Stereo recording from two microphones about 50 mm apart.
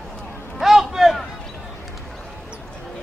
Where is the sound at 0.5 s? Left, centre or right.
Centre.